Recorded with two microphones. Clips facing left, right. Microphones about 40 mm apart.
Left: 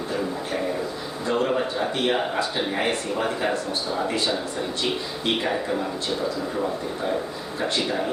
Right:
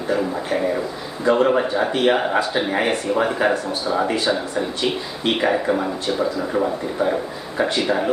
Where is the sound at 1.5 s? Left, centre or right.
Right.